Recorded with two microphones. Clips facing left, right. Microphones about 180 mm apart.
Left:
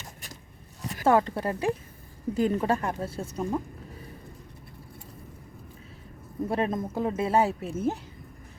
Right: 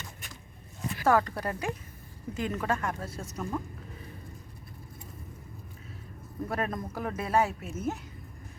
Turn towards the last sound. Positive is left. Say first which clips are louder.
# left 5 dB
turn(degrees=30)  # may be behind; listen again after turning